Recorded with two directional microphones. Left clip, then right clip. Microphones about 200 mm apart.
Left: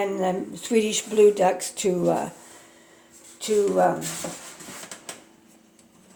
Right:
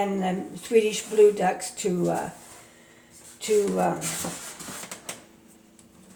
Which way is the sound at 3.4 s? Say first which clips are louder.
Right 1 dB; 35° left (ahead or behind).